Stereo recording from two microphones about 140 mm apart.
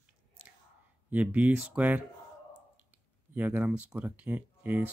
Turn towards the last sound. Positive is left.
turn(degrees=-15)  # may be behind; listen again after turning